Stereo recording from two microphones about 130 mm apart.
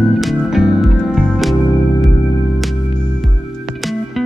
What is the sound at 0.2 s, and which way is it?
Music, centre (ahead or behind).